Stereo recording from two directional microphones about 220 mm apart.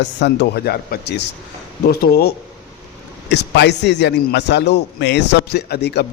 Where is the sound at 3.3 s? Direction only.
50° left (ahead or behind).